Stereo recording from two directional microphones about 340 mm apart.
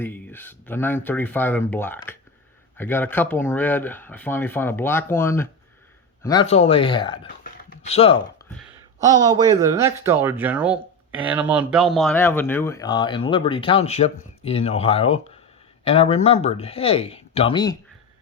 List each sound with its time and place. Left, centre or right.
0.0 s speech: centre
9.0 s speech: centre